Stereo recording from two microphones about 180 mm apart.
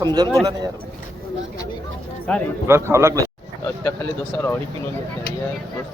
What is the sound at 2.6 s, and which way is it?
Speech, 15° right (ahead or behind).